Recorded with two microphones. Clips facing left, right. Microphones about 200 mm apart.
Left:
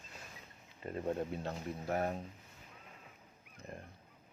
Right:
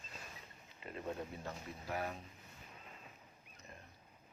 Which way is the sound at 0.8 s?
45° left (ahead or behind).